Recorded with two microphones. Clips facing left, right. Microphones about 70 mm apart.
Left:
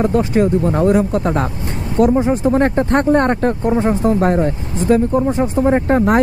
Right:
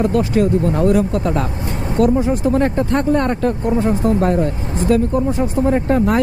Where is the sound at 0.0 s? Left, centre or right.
Left.